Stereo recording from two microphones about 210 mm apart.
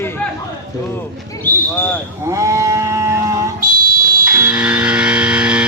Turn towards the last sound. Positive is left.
turn(degrees=-5)  # may be behind; listen again after turning